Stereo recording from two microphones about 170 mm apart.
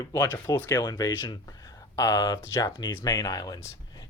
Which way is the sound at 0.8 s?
25° left (ahead or behind).